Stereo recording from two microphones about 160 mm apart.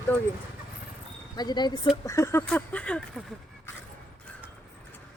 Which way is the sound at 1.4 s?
25° left (ahead or behind).